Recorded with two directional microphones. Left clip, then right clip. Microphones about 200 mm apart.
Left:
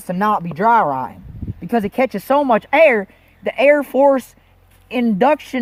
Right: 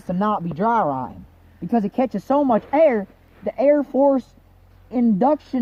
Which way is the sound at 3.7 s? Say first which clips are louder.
Left 4 dB; 35° left (ahead or behind).